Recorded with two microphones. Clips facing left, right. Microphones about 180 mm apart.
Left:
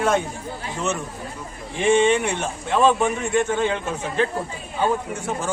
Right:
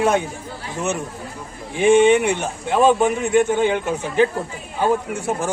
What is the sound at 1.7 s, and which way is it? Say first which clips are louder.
A man's voice: right 4 dB; 10° right (ahead or behind).